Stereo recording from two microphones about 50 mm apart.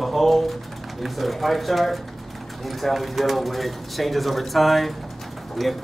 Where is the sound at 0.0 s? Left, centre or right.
Centre.